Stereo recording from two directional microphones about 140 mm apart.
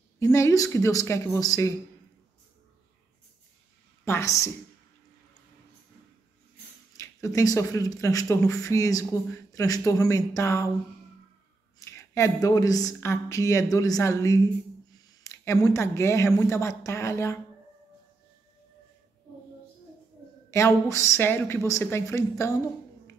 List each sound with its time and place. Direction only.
0.2 s speech: 20° left (ahead or behind)
4.0 s a woman's voice: 20° left (ahead or behind)
7.0 s speech: 20° left (ahead or behind)
11.8 s speech: 20° left (ahead or behind)
20.5 s speech: 20° left (ahead or behind)